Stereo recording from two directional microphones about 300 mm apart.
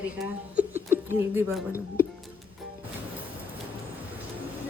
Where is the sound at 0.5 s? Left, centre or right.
Centre.